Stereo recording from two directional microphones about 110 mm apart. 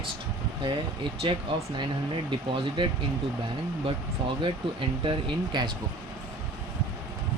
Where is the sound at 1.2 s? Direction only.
50° right (ahead or behind).